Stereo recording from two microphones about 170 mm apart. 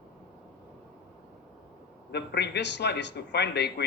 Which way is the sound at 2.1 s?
80° left.